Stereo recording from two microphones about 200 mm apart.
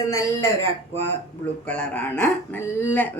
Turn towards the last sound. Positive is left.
turn(degrees=10)  # may be behind; listen again after turning